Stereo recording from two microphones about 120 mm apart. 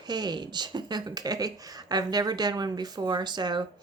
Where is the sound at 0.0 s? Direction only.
35° right (ahead or behind).